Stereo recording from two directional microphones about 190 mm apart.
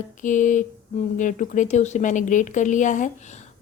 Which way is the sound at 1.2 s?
45° left (ahead or behind).